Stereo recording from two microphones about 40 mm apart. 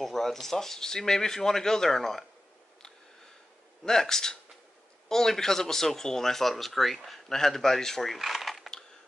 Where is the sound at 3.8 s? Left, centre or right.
Centre.